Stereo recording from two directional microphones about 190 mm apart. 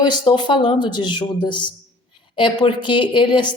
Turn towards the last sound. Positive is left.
turn(degrees=25)  # may be behind; listen again after turning